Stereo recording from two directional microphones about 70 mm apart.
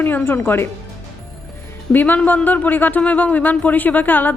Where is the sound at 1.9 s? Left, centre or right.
Left.